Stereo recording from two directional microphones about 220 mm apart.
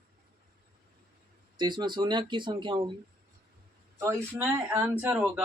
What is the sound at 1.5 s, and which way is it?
Speech, 20° right (ahead or behind).